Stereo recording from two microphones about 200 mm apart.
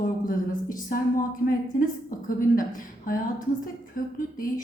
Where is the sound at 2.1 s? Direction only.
45° left (ahead or behind).